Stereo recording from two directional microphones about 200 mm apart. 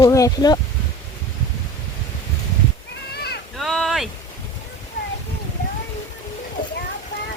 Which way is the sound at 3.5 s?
Centre (ahead or behind).